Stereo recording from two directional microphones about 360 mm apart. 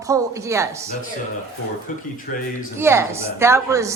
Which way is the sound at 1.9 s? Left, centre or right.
Left.